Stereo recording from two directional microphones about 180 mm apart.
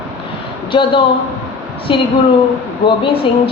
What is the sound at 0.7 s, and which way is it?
Speech, 30° left (ahead or behind).